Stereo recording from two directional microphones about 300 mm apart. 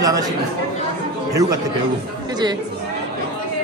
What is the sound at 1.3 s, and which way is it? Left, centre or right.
Speech, centre.